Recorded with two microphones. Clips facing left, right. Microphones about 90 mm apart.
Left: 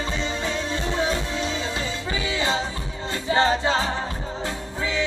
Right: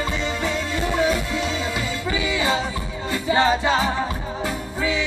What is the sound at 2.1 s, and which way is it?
Music, 20° right (ahead or behind).